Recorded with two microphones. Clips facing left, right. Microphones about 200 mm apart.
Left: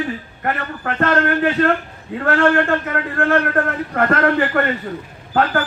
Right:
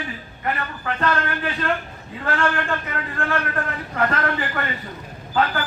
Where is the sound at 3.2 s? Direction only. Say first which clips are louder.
Left 8 dB; 50° left (ahead or behind).